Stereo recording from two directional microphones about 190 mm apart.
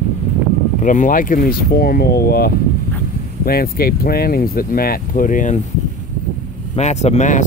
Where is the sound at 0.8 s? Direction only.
40° left (ahead or behind).